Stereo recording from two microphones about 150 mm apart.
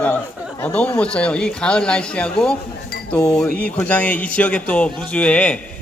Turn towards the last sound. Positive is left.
turn(degrees=10)  # may be behind; listen again after turning